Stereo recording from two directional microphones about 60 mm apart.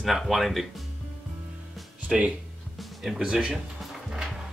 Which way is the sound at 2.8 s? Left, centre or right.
Centre.